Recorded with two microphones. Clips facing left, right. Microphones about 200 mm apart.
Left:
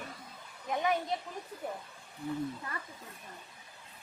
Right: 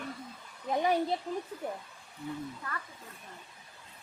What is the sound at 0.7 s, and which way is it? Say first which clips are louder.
Speech: right 3 dB; 30° right (ahead or behind).